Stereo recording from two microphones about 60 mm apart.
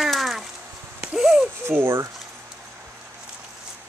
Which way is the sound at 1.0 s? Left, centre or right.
Centre.